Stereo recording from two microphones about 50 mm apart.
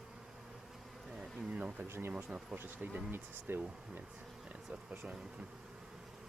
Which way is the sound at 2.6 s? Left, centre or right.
Right.